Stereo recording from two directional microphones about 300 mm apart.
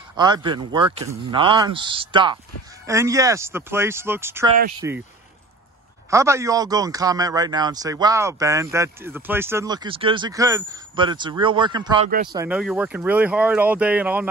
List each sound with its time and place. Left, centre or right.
0.1 s a man's voice: centre
6.0 s a man's voice: centre